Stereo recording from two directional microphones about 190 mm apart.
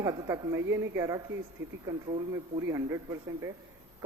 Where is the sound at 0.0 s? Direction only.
20° right (ahead or behind).